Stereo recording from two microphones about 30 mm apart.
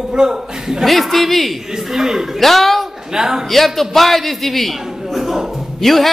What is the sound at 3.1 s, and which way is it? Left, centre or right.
Speech, centre.